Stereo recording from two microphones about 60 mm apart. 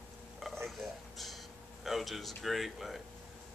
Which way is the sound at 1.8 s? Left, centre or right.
Centre.